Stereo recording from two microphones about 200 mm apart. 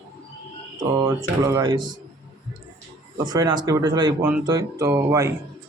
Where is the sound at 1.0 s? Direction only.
15° right (ahead or behind).